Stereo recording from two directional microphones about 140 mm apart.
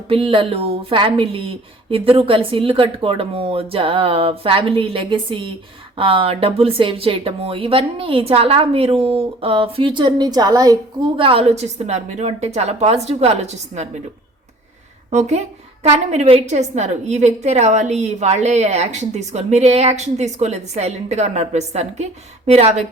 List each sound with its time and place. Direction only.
0.1 s speech: 40° right (ahead or behind)
11.2 s a woman's voice: 40° right (ahead or behind)
15.1 s a woman's voice: 55° right (ahead or behind)